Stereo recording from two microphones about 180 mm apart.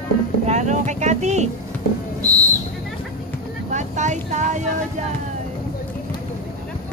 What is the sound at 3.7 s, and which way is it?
Speech, 40° right (ahead or behind).